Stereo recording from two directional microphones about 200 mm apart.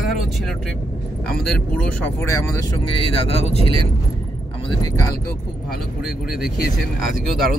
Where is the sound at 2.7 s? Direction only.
25° left (ahead or behind).